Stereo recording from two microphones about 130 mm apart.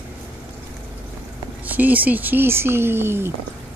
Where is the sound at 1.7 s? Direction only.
15° right (ahead or behind).